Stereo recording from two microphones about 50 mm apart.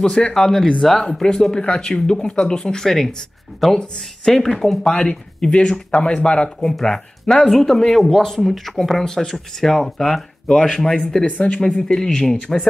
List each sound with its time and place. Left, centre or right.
0.0 s speech: centre
1.0 s speech: centre
6.7 s speech: centre
11.2 s speech: left
11.6 s speech: centre